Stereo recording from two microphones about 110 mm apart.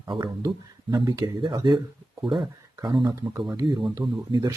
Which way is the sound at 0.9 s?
35° right (ahead or behind).